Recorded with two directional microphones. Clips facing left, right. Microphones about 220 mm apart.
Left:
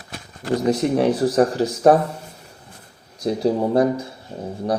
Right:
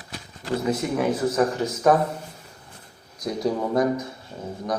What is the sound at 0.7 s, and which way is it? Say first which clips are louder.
Speech: left 6 dB; 35° left (ahead or behind).